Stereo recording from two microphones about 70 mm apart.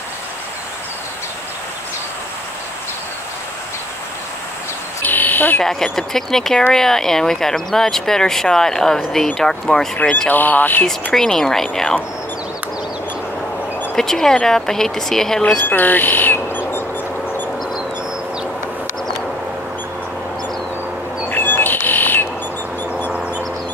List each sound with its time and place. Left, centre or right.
5.0 s a sound: left
5.6 s speech: centre
10.3 s speech: left
11.1 s speech: centre
13.9 s speech: centre
15.6 s a sound: left
21.3 s bird: left